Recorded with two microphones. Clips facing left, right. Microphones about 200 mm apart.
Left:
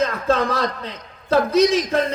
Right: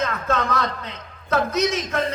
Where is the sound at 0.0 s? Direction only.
30° left (ahead or behind).